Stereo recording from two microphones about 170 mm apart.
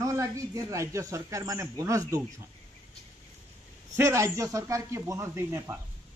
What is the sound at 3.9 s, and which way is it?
A man's voice, 15° right (ahead or behind).